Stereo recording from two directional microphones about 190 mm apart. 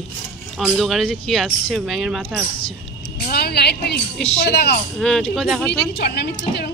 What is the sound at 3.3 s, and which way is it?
A woman's voice, 55° left (ahead or behind).